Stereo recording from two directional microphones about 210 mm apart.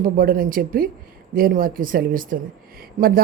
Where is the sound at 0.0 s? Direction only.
45° right (ahead or behind).